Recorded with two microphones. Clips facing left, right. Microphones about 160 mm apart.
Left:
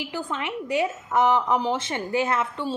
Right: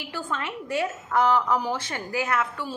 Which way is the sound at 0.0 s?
15° left (ahead or behind).